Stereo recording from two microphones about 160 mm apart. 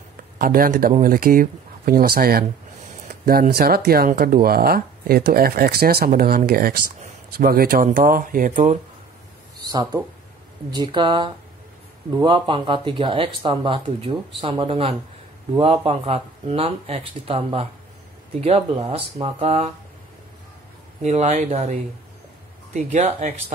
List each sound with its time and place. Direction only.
0.4 s speech: 65° right (ahead or behind)
9.6 s speech: 25° right (ahead or behind); by 19.7 s 40° right (ahead or behind)
21.0 s speech: 45° right (ahead or behind)